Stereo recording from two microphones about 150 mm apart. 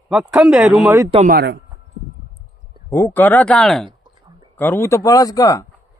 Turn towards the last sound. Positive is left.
turn(degrees=20)  # may be behind; listen again after turning